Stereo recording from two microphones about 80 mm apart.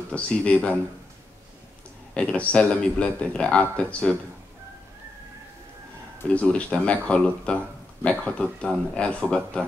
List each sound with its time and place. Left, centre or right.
0.1 s a man's voice: centre
2.1 s a man's voice: centre
6.3 s a man's voice: centre